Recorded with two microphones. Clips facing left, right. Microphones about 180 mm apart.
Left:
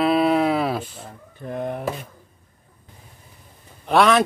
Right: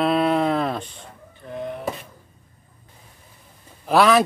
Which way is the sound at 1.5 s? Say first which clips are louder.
Left 3 dB; 55° left (ahead or behind).